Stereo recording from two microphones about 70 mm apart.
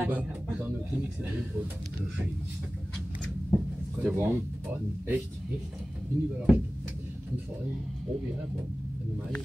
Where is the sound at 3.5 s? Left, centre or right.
Centre.